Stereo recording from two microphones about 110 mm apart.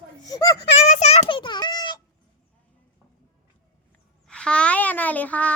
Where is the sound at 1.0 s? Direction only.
90° left.